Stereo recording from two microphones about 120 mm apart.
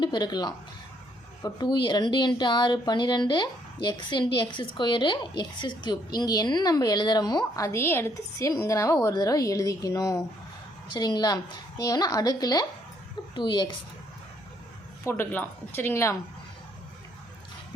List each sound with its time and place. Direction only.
0.0 s speech: 40° left (ahead or behind)
15.0 s speech: 20° left (ahead or behind)